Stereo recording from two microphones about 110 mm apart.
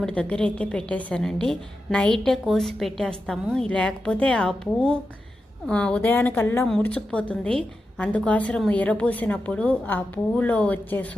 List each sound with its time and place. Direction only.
0.0 s a woman's voice: 10° left (ahead or behind)
6.7 s a woman's voice: 10° left (ahead or behind)